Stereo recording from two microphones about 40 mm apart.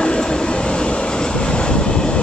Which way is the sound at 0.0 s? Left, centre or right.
Centre.